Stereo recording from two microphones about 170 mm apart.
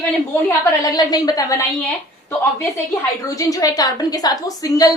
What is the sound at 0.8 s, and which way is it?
Speech, 20° left (ahead or behind).